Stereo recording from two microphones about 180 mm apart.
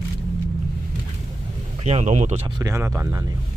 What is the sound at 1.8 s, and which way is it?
Speech, 40° right (ahead or behind).